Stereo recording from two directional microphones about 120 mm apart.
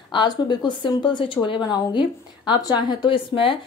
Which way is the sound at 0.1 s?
40° left (ahead or behind).